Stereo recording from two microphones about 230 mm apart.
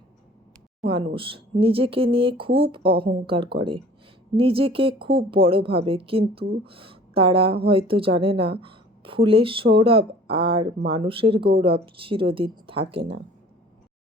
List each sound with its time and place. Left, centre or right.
0.9 s a woman's voice: right